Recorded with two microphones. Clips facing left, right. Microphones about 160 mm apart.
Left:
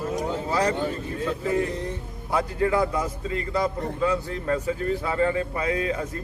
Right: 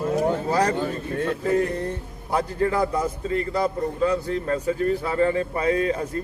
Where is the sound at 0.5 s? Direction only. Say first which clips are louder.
Left 1 dB; 40° right (ahead or behind).